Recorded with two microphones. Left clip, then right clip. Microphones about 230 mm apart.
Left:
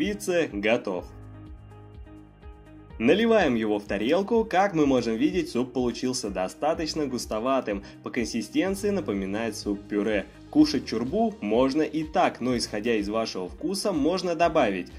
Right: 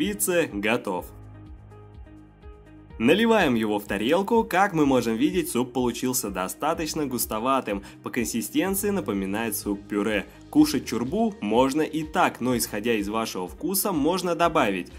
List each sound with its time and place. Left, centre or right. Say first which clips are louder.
0.3 s speech: even; right
3.0 s speech: right 1 dB; right